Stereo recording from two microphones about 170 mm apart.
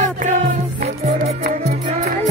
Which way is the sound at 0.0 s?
50° right (ahead or behind).